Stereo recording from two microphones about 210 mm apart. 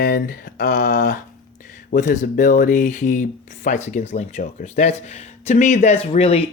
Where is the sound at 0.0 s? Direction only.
40° left (ahead or behind).